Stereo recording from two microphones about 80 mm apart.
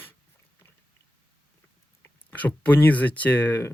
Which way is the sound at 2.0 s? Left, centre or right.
Centre.